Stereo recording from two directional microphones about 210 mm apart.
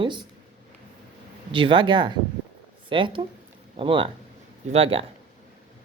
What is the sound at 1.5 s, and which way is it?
A woman's voice, 25° right (ahead or behind).